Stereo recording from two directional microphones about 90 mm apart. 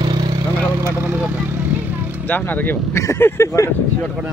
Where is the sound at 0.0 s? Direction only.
55° right (ahead or behind).